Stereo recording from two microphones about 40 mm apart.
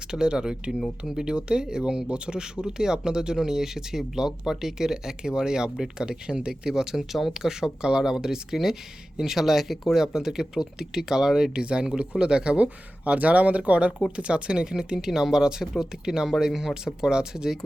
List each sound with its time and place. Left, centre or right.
0.1 s speech: centre